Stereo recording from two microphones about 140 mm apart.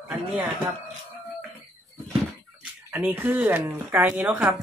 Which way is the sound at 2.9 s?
15° right (ahead or behind).